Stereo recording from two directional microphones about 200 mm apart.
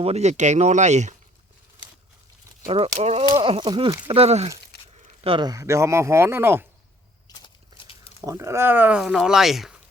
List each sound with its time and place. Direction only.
0.0 s speech: 35° right (ahead or behind)
2.6 s speech: 30° right (ahead or behind)
3.2 s speech: 20° right (ahead or behind)
4.7 s a sound: 55° left (ahead or behind)
5.2 s speech: 25° right (ahead or behind)
7.3 s a sound: 25° left (ahead or behind)
8.2 s speech: 15° right (ahead or behind)